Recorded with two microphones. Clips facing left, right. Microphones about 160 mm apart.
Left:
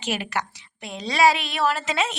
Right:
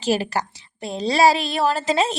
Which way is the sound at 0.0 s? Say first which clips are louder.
Right 6 dB; 35° right (ahead or behind).